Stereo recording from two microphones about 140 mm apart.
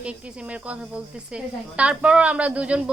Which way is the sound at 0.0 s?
10° right (ahead or behind).